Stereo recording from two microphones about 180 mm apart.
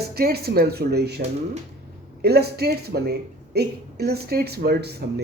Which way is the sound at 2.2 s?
60° right (ahead or behind).